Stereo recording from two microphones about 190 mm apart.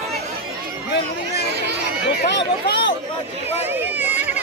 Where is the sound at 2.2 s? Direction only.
60° left (ahead or behind).